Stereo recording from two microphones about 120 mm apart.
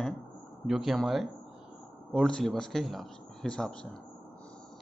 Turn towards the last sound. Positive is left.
turn(degrees=5)  # may be behind; listen again after turning